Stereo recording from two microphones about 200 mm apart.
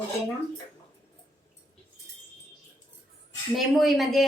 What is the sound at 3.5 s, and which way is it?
Speech, centre (ahead or behind).